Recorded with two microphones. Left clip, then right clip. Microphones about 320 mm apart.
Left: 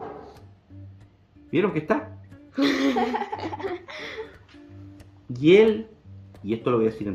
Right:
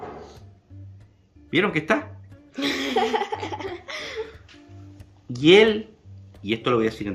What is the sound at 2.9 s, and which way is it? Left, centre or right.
Laughter, right.